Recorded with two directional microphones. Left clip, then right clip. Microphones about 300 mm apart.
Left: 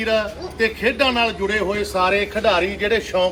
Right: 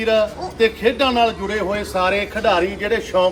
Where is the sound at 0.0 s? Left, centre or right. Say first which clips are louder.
Right 3 dB; centre.